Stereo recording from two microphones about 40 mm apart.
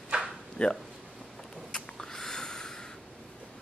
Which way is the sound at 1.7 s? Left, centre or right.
Centre.